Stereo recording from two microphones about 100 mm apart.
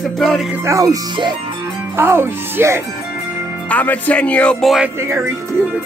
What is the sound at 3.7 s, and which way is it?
Music, 15° left (ahead or behind).